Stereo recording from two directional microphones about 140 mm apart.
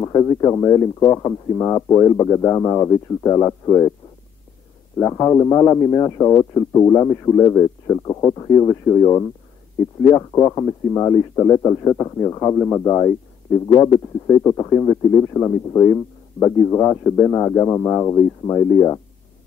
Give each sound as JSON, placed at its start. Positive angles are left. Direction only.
{"t": 0.0, "sound": "a man's voice", "side_deg": 25}
{"t": 4.9, "sound": "a man's voice", "side_deg": 20}